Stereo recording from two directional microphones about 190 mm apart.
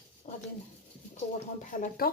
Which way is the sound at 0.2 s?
40° left (ahead or behind).